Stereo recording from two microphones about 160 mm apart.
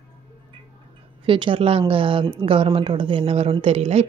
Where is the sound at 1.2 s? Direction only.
30° right (ahead or behind).